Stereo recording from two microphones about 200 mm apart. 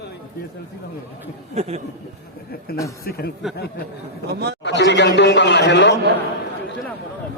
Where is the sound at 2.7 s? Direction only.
50° left (ahead or behind).